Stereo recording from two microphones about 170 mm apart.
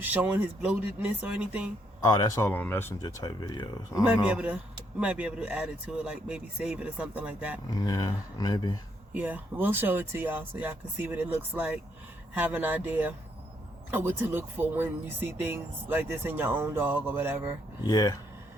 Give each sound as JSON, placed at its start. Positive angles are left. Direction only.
{"t": 0.0, "sound": "a man's voice", "side_deg": -10}
{"t": 2.0, "sound": "speech", "side_deg": 20}
{"t": 4.0, "sound": "a man's voice", "side_deg": -5}
{"t": 7.8, "sound": "speech", "side_deg": 25}
{"t": 9.1, "sound": "a man's voice", "side_deg": -10}
{"t": 17.8, "sound": "speech", "side_deg": 20}